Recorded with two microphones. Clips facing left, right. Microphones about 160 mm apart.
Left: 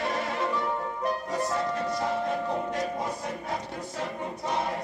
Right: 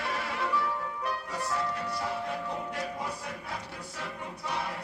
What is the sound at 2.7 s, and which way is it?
Chant, 40° left (ahead or behind).